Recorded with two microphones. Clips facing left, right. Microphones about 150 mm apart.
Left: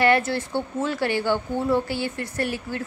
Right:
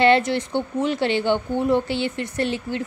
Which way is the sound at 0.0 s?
20° right (ahead or behind).